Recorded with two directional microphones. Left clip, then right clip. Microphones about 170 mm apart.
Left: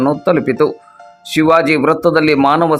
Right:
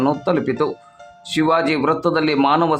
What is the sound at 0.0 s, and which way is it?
Speech, 20° left (ahead or behind).